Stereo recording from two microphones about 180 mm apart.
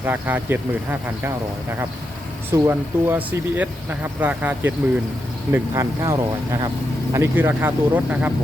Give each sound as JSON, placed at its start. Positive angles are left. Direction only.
{"t": 0.0, "sound": "speech", "side_deg": -10}
{"t": 2.5, "sound": "speech", "side_deg": -15}